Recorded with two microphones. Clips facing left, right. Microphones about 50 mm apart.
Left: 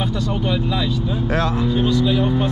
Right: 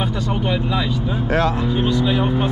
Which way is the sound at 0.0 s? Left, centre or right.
Right.